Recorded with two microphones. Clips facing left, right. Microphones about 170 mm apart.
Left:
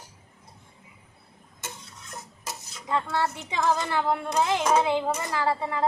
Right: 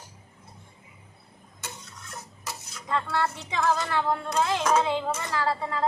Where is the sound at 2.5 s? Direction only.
15° left (ahead or behind).